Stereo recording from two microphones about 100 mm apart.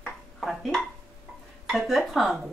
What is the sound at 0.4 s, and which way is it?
Dishes, centre (ahead or behind).